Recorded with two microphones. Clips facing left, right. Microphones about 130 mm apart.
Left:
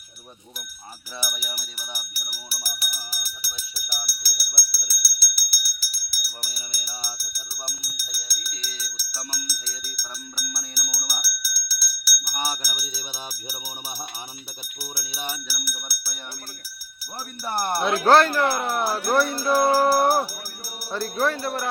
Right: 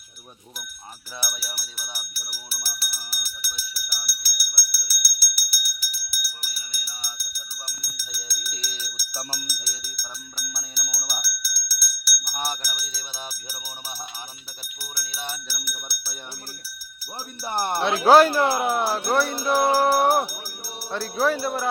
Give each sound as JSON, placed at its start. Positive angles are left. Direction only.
{"t": 1.2, "sound": "speech", "side_deg": 15}
{"t": 7.9, "sound": "speech", "side_deg": 10}
{"t": 8.8, "sound": "speech", "side_deg": -10}
{"t": 10.0, "sound": "speech", "side_deg": 5}
{"t": 14.8, "sound": "speech", "side_deg": 15}
{"t": 17.4, "sound": "speech", "side_deg": -20}
{"t": 17.9, "sound": "speech", "side_deg": -10}
{"t": 18.7, "sound": "speech", "side_deg": 0}
{"t": 19.5, "sound": "speech", "side_deg": -15}
{"t": 20.9, "sound": "speech", "side_deg": -5}